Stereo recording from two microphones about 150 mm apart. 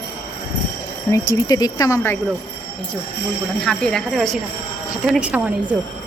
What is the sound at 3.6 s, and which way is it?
A woman's voice, 5° left (ahead or behind).